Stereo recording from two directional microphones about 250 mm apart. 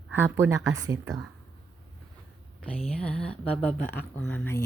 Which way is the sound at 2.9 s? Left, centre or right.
Centre.